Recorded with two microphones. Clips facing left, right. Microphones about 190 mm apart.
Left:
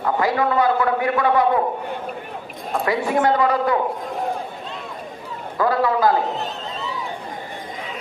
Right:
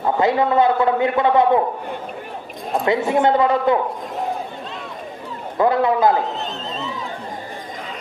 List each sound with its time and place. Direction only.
0.0 s a man's voice: 25° right (ahead or behind)
2.8 s a man's voice: 25° right (ahead or behind)
5.5 s a man's voice: 20° right (ahead or behind)